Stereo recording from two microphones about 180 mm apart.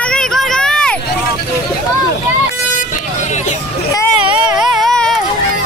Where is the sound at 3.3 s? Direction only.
40° left (ahead or behind).